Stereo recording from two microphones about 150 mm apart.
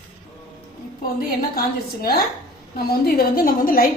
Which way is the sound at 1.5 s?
85° left.